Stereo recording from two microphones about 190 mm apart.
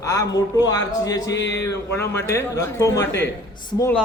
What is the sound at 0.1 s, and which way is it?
A man's voice, 20° left (ahead or behind).